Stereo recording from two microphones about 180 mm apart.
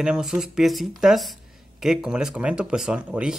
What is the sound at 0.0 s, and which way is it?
Speech, 5° right (ahead or behind).